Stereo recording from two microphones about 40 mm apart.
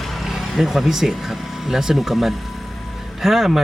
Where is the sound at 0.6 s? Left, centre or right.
Centre.